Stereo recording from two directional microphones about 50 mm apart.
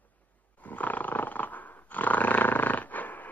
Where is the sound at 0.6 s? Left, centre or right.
Left.